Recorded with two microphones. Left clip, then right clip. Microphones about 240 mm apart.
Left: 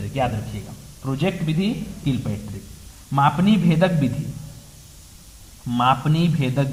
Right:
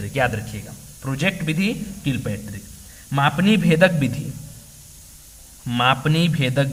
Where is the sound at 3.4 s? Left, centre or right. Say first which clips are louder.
Right 4 dB; right.